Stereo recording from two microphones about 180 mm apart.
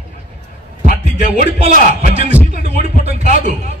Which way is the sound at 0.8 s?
50° left (ahead or behind).